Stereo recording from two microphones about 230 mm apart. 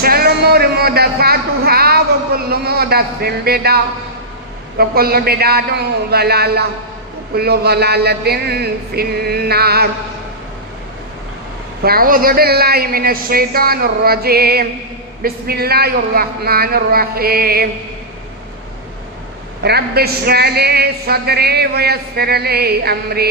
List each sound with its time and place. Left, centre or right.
0.0 s a sound: right
4.8 s a woman's voice: right
11.8 s a man's voice: right
19.6 s a woman's voice: right